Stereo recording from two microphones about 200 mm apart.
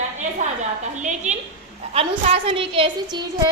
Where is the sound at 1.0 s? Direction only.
35° right (ahead or behind).